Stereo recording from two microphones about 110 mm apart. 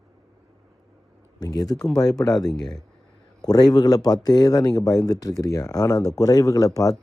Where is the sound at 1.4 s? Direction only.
35° left (ahead or behind).